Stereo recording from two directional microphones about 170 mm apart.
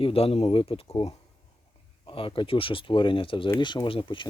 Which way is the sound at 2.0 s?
30° left (ahead or behind).